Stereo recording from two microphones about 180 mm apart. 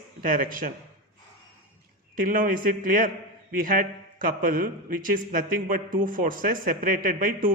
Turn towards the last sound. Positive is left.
turn(degrees=-50)  # may be behind; listen again after turning